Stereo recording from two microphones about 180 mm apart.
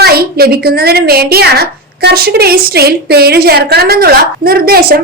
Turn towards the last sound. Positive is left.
turn(degrees=-55)  # may be behind; listen again after turning